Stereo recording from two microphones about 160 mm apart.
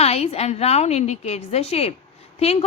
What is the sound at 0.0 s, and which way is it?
A woman's voice, 40° left (ahead or behind).